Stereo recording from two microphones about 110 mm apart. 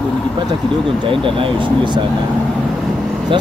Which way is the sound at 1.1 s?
50° right (ahead or behind).